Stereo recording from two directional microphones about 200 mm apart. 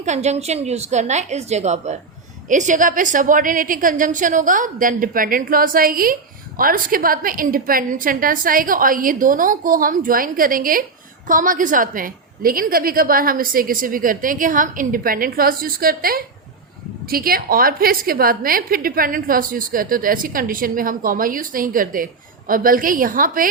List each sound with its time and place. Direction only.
0.0 s a woman's voice: 35° right (ahead or behind)